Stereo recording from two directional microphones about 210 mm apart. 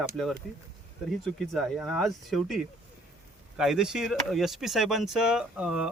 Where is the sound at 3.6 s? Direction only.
5° right (ahead or behind).